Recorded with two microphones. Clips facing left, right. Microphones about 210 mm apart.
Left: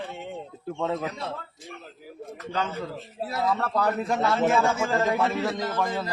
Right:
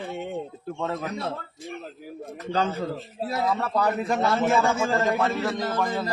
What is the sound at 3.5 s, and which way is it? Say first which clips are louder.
Speech: even; 5° right (ahead or behind).